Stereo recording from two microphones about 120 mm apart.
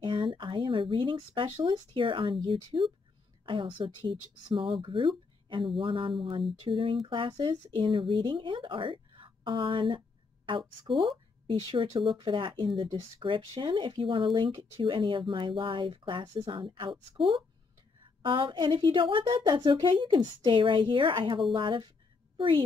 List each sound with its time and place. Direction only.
0.0 s speech: 45° right (ahead or behind)